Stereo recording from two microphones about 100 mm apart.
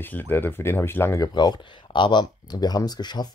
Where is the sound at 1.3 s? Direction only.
45° left (ahead or behind).